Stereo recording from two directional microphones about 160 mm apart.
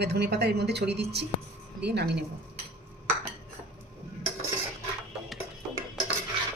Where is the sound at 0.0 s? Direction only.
90° right.